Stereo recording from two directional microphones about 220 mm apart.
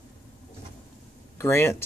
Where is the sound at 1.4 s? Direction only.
10° left (ahead or behind).